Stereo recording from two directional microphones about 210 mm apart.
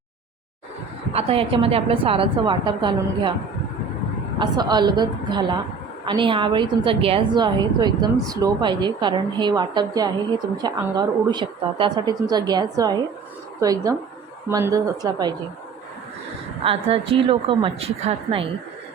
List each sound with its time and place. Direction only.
1.1 s a woman's voice: 30° right (ahead or behind)
4.4 s a woman's voice: 20° right (ahead or behind)
16.6 s a woman's voice: 25° right (ahead or behind)